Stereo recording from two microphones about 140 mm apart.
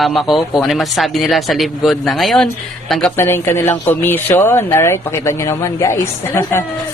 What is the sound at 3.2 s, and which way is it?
Speech, 15° left (ahead or behind).